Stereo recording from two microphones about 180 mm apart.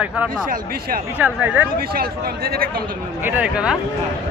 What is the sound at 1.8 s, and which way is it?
Speech, 55° right (ahead or behind).